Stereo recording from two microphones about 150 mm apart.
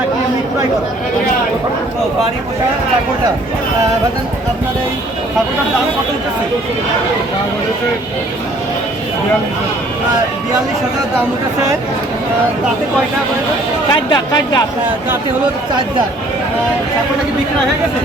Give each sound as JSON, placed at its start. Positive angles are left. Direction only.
{"t": 13.9, "sound": "speech", "side_deg": 30}